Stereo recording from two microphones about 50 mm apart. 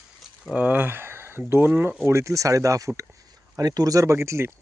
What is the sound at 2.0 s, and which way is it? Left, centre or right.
Speech, right.